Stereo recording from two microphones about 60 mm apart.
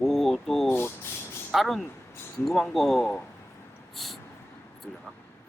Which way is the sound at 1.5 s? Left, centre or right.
Centre.